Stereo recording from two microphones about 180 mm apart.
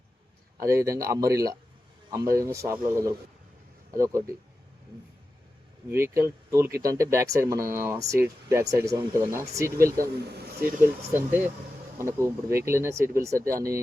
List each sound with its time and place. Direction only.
0.6 s speech: 15° right (ahead or behind)
5.9 s speech: 15° right (ahead or behind)
9.8 s speech: 60° right (ahead or behind)
11.3 s speech: 10° right (ahead or behind)